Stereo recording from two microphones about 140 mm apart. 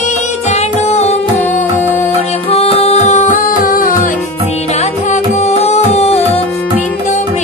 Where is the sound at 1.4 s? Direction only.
15° left (ahead or behind).